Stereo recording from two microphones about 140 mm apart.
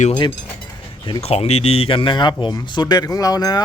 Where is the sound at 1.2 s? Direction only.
45° left (ahead or behind); by 3.6 s 25° left (ahead or behind).